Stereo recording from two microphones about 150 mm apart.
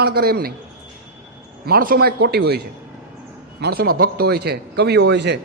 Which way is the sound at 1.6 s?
80° right.